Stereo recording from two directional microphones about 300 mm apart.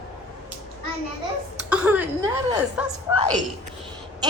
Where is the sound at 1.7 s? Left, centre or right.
Centre.